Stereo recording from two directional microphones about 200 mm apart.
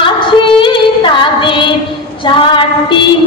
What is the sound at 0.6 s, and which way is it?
Female singing, 25° left (ahead or behind).